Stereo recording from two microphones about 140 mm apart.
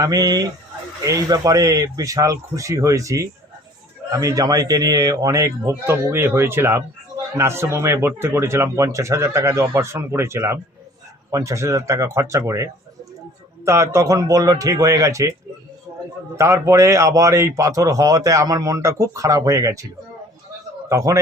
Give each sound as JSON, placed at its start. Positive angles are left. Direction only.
{"t": 0.0, "sound": "speech", "side_deg": -25}
{"t": 13.7, "sound": "speech", "side_deg": -20}
{"t": 15.9, "sound": "a sound", "side_deg": -25}
{"t": 16.4, "sound": "speech", "side_deg": -20}
{"t": 20.9, "sound": "speech", "side_deg": -20}